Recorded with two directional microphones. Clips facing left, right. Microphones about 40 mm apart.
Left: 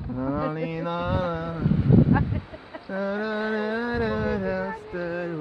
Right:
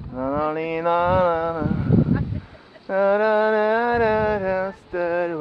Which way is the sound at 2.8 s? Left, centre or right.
Right.